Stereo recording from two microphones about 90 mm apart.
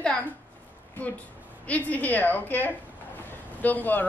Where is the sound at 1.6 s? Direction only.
15° left (ahead or behind).